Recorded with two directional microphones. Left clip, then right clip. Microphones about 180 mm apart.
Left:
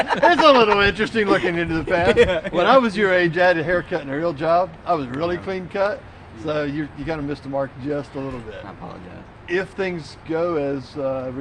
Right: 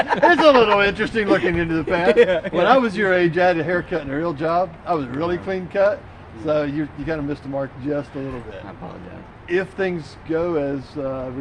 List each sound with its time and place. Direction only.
0.1 s speech: 20° right (ahead or behind)
0.4 s speech: 20° left (ahead or behind)
2.1 s speech: 15° right (ahead or behind)
2.5 s speech: 20° left (ahead or behind)
9.5 s speech: 20° left (ahead or behind)